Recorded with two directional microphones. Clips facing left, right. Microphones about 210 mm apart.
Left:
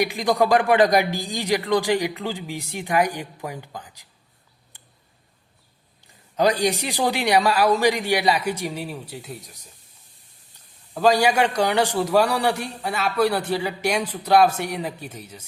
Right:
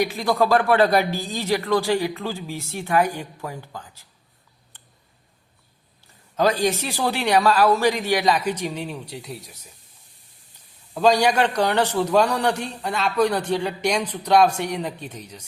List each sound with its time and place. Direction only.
0.0 s a man's voice: 15° left (ahead or behind)
4.7 s tick: 10° left (ahead or behind)
6.3 s a man's voice: 15° left (ahead or behind); by 9.6 s centre (ahead or behind)
10.9 s a man's voice: 5° left (ahead or behind)